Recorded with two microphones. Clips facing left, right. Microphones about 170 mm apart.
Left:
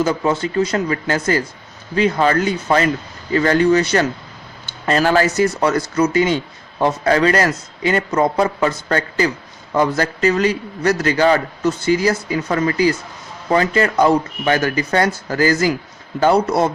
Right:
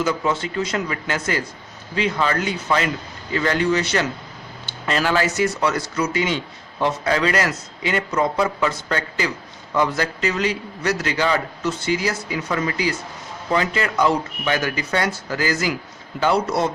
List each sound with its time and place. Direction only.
0.0 s a man's voice: 40° left (ahead or behind)